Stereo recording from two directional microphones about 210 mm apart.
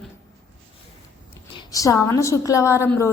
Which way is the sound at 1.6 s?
15° left (ahead or behind).